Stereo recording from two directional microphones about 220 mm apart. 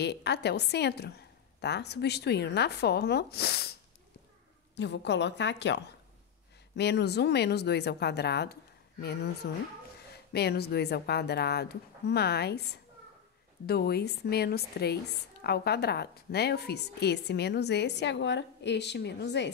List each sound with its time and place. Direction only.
0.0 s a woman's voice: 50° left (ahead or behind)
4.7 s a woman's voice: 50° left (ahead or behind)
6.8 s a woman's voice: 50° left (ahead or behind)